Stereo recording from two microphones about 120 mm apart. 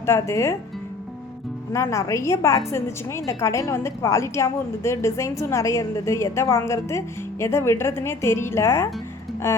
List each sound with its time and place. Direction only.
0.0 s a woman's voice: 25° left (ahead or behind)
1.7 s a woman's voice: 25° left (ahead or behind)